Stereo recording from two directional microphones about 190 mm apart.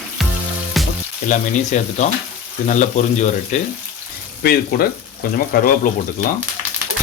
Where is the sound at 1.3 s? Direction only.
40° left (ahead or behind).